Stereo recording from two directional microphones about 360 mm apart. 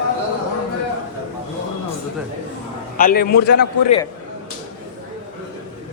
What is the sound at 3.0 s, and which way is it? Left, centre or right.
Speech, left.